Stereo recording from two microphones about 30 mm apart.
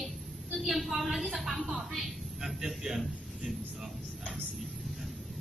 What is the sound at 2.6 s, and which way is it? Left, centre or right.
Speech, centre.